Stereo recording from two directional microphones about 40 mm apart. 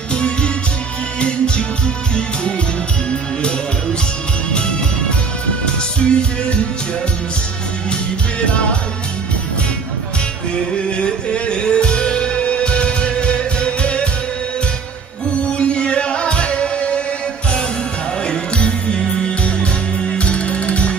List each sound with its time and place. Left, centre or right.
0.1 s music: left
4.5 s music: left
5.9 s music: left
10.5 s music: left
15.5 s music: left
18.2 s music: left